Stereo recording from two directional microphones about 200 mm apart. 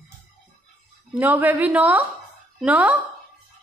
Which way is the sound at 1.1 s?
10° right (ahead or behind).